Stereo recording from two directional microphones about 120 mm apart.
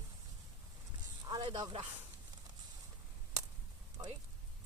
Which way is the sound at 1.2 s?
35° right (ahead or behind).